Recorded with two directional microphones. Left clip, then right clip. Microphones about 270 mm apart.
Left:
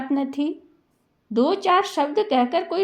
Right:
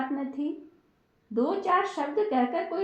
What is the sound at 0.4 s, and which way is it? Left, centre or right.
Speech, left.